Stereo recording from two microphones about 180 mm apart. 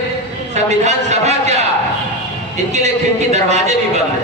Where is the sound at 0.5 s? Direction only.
40° right (ahead or behind).